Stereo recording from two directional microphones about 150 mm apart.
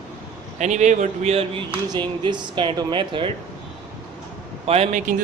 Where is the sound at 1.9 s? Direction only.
30° right (ahead or behind).